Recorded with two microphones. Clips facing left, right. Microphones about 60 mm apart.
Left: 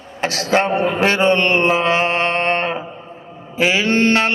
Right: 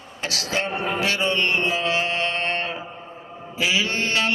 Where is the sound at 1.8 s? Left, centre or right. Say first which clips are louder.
Left 7 dB; left.